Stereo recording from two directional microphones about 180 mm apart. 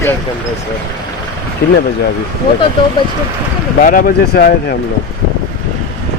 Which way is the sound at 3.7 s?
50° left (ahead or behind).